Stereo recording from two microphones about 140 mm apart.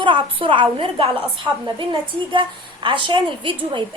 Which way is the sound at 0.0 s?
40° right (ahead or behind).